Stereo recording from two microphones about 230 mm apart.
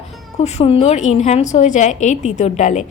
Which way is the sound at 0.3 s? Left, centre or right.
Left.